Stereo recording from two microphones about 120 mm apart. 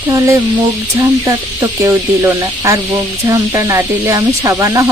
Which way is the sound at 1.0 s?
25° right (ahead or behind).